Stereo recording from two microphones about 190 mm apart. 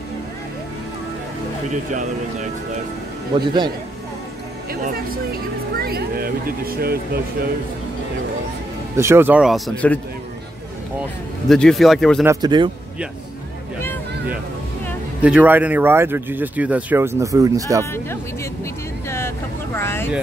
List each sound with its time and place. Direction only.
3.3 s speech: 20° right (ahead or behind)
5.8 s speech: 55° right (ahead or behind)
8.9 s speech: 15° right (ahead or behind)
9.8 s speech: 5° left (ahead or behind)
11.4 s speech: centre (ahead or behind)
12.3 s speech: 20° right (ahead or behind)
15.2 s speech: 5° right (ahead or behind)
17.9 s speech: 15° left (ahead or behind)
19.0 s vehicle: 15° left (ahead or behind)